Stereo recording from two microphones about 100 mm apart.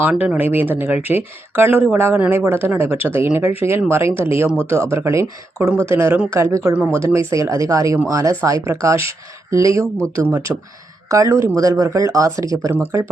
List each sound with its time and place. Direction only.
0.0 s speech: 10° right (ahead or behind); by 9.8 s 30° right (ahead or behind)
10.5 s speech: 15° right (ahead or behind)
11.1 s speech: 30° right (ahead or behind)